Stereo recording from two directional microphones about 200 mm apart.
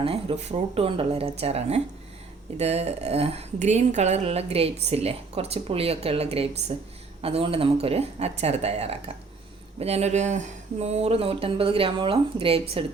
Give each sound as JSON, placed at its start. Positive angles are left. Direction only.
{"t": 0.0, "sound": "speech", "side_deg": -30}